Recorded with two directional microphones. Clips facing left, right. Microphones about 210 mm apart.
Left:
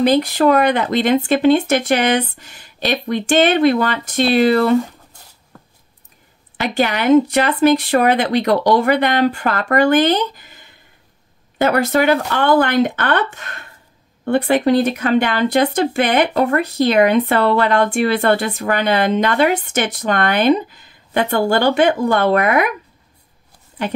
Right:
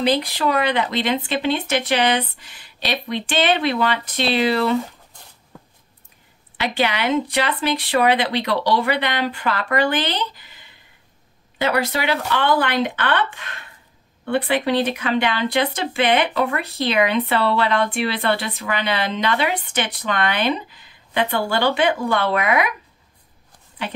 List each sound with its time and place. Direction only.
0.0 s speech: 45° left (ahead or behind)
6.6 s speech: 45° left (ahead or behind)